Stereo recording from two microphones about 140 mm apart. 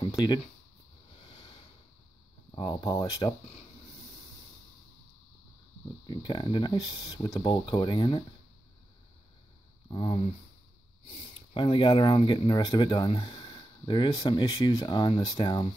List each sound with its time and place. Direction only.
0.0 s a sound: 30° left (ahead or behind)
2.5 s speech: 30° left (ahead or behind)
6.0 s speech: 30° left (ahead or behind)
9.8 s speech: 35° left (ahead or behind)